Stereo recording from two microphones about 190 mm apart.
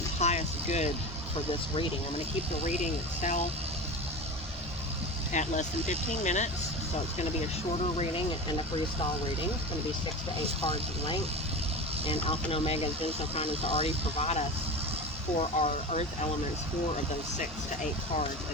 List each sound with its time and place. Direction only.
0.2 s vehicle: 35° left (ahead or behind)
2.6 s speech: 40° left (ahead or behind)
5.3 s speech: 40° left (ahead or behind)
12.0 s speech: 30° left (ahead or behind)